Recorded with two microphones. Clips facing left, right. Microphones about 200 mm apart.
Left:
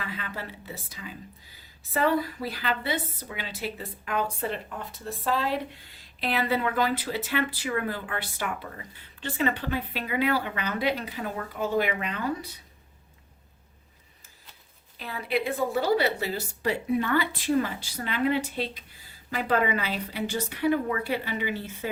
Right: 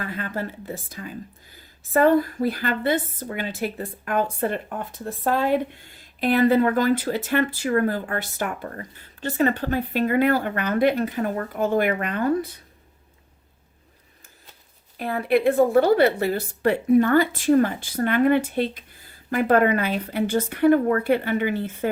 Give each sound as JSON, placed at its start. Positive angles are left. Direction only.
{"t": 0.0, "sound": "a woman's voice", "side_deg": -50}
{"t": 14.9, "sound": "a woman's voice", "side_deg": -55}